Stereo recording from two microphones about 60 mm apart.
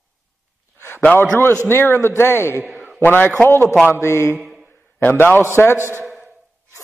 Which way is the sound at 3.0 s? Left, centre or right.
Left.